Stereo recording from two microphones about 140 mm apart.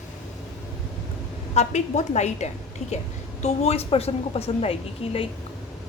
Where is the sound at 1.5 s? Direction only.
55° left (ahead or behind).